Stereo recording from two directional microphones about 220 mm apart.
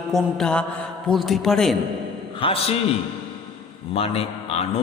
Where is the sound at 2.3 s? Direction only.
25° left (ahead or behind).